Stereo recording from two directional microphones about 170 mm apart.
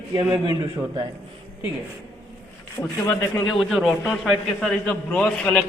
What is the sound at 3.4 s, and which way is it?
A man's voice, centre (ahead or behind).